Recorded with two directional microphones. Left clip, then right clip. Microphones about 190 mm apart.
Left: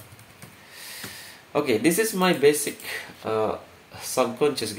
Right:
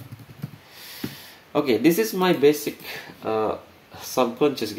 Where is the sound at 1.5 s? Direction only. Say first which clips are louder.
Right 2 dB; 45° right (ahead or behind).